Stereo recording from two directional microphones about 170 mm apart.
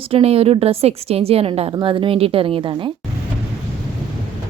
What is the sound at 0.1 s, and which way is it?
A woman's voice, 35° right (ahead or behind).